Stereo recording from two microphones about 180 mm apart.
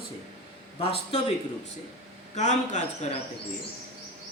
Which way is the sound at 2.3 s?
40° left (ahead or behind).